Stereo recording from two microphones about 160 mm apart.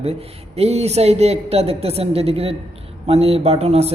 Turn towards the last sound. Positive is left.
turn(degrees=-40)  # may be behind; listen again after turning